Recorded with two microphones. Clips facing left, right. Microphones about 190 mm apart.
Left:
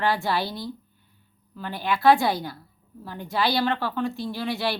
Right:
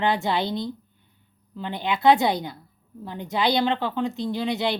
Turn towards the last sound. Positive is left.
turn(degrees=-20)  # may be behind; listen again after turning